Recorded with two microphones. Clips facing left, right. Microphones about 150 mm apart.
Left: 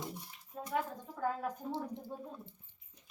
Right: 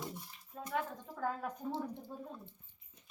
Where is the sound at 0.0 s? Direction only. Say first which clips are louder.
Left 1 dB; 15° left (ahead or behind).